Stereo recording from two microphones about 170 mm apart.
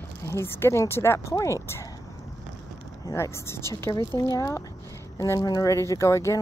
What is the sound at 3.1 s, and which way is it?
Speech, 15° left (ahead or behind).